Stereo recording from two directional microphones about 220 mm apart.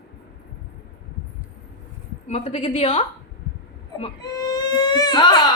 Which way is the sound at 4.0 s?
20° left (ahead or behind).